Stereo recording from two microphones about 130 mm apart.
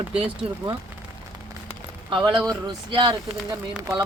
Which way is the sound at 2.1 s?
40° right (ahead or behind).